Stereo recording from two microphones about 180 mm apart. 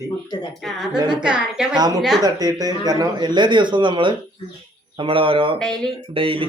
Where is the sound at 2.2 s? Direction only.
20° right (ahead or behind).